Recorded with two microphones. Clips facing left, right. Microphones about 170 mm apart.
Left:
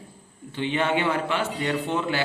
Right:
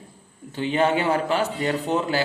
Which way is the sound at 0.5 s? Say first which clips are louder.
Right 3 dB; 40° right (ahead or behind).